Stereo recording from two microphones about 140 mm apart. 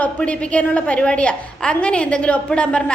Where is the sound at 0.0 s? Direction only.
10° left (ahead or behind).